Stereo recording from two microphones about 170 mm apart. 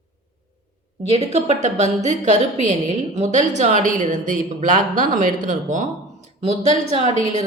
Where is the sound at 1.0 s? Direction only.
35° right (ahead or behind).